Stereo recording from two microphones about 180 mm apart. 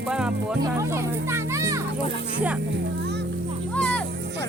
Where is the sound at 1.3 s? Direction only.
15° right (ahead or behind).